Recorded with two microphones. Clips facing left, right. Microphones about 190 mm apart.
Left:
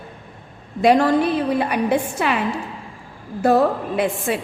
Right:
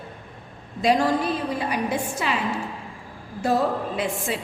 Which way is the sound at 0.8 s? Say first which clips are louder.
Left 5 dB; 60° left (ahead or behind).